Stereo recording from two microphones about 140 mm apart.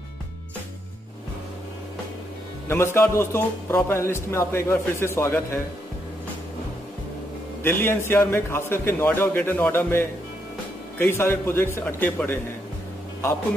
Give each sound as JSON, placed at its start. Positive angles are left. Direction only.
{"t": 2.7, "sound": "a man's voice", "side_deg": 20}
{"t": 7.6, "sound": "a man's voice", "side_deg": 15}